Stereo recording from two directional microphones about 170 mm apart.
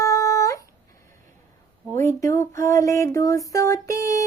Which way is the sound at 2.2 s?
15° left (ahead or behind).